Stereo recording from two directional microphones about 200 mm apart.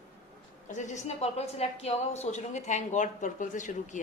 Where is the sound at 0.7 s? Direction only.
35° left (ahead or behind).